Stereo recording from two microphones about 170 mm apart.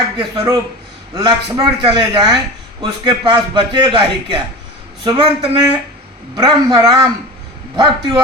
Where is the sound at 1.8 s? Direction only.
25° right (ahead or behind).